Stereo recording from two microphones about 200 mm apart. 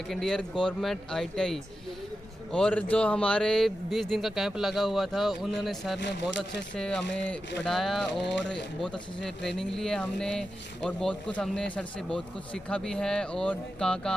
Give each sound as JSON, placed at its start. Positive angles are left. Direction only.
{"t": 0.1, "sound": "speech", "side_deg": 0}
{"t": 6.0, "sound": "speech", "side_deg": 60}
{"t": 6.7, "sound": "speech", "side_deg": 5}